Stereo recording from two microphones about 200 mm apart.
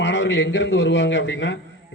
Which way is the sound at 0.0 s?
65° left (ahead or behind).